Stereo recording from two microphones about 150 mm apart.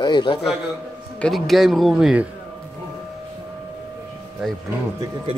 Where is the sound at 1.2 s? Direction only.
Centre (ahead or behind).